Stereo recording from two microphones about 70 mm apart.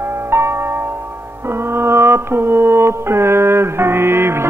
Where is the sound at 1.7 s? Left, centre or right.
Right.